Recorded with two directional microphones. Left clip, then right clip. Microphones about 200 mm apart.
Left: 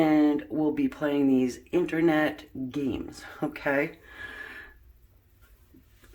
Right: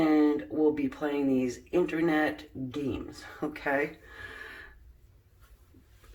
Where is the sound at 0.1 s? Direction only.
40° left (ahead or behind).